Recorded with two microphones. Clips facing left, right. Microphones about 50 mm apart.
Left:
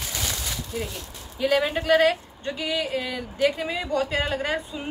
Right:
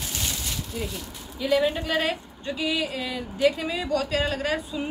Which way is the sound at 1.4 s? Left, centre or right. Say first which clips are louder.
Even; left.